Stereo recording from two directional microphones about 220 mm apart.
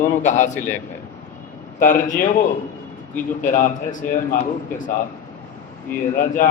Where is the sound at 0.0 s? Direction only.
35° left (ahead or behind).